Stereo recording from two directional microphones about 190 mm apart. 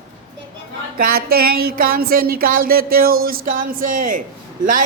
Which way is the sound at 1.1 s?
55° right (ahead or behind).